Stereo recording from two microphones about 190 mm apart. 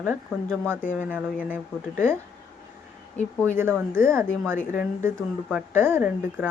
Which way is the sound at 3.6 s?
10° right (ahead or behind).